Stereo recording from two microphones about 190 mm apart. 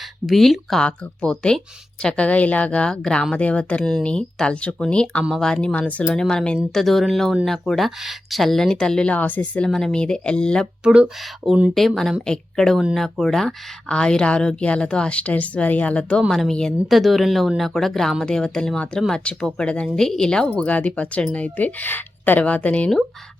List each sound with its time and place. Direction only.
0.3 s speech: centre (ahead or behind)